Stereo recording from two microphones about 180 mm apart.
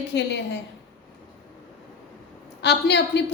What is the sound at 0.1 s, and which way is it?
Speech, 70° left (ahead or behind).